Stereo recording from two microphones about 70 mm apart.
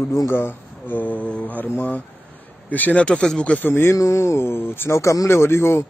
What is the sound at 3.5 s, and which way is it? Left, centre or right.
Speech, left.